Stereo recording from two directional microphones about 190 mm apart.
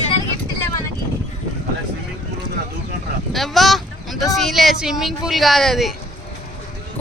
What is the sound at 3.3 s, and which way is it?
A woman's voice, centre (ahead or behind).